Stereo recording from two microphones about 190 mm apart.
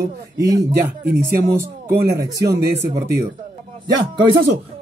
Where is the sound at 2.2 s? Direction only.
15° right (ahead or behind).